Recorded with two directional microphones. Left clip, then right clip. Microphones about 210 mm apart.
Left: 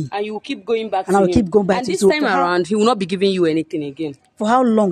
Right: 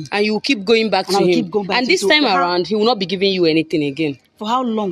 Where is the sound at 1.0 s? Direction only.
30° left (ahead or behind).